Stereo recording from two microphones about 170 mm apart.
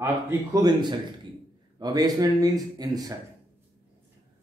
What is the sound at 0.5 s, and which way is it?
Speech, 25° right (ahead or behind).